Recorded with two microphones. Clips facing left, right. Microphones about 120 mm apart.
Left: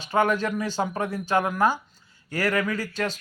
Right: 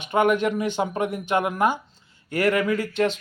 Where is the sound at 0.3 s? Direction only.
20° right (ahead or behind).